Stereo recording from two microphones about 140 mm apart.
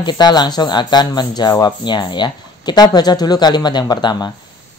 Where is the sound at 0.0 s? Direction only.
30° left (ahead or behind).